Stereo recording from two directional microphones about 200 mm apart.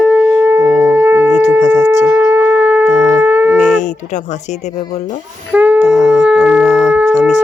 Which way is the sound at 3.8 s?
35° left (ahead or behind).